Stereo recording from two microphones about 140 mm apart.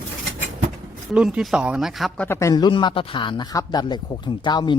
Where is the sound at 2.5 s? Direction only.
30° left (ahead or behind).